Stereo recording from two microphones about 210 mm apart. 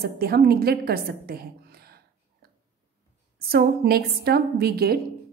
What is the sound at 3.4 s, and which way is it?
A woman's voice, 45° right (ahead or behind).